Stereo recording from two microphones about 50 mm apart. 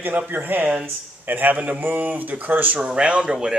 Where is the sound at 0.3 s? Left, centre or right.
Right.